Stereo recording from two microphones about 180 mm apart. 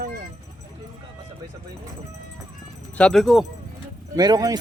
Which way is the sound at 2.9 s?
5° left (ahead or behind).